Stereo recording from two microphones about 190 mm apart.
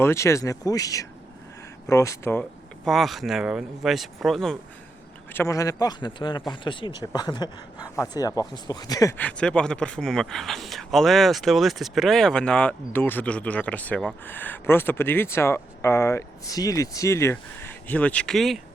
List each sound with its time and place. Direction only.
0.0 s speech: 15° left (ahead or behind)
5.3 s speech: 15° left (ahead or behind)